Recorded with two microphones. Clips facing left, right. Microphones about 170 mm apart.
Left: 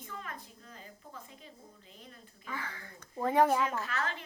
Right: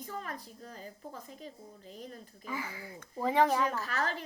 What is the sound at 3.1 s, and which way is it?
Speech, centre (ahead or behind).